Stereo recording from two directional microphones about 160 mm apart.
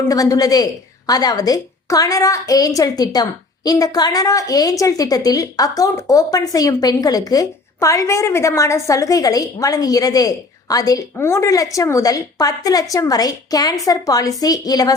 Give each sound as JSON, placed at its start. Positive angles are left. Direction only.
{"t": 0.1, "sound": "a woman's voice", "side_deg": 20}